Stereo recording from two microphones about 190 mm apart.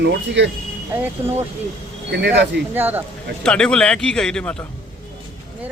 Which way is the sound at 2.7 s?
10° right (ahead or behind).